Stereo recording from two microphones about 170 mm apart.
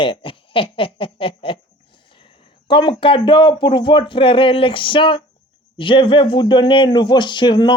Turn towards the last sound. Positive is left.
turn(degrees=25)  # may be behind; listen again after turning